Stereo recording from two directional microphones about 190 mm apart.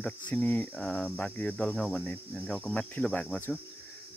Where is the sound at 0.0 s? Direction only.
10° left (ahead or behind).